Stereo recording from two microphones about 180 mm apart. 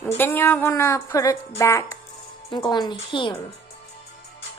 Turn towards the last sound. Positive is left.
turn(degrees=25)  # may be behind; listen again after turning